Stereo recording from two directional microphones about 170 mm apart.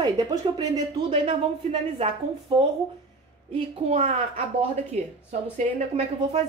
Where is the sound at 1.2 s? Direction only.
35° right (ahead or behind).